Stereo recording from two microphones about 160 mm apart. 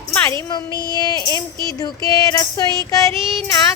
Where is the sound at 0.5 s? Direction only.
25° left (ahead or behind).